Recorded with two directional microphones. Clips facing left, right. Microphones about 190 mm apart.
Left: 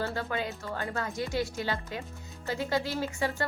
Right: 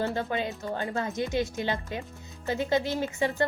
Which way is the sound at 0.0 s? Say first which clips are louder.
Right 3 dB; 20° right (ahead or behind).